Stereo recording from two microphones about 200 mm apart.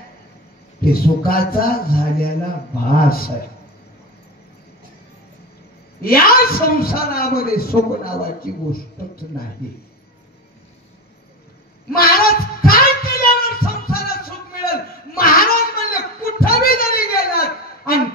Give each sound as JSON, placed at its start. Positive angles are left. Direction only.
{"t": 0.8, "sound": "a man's voice", "side_deg": 50}
{"t": 6.0, "sound": "a man's voice", "side_deg": 45}
{"t": 11.9, "sound": "a sound", "side_deg": 50}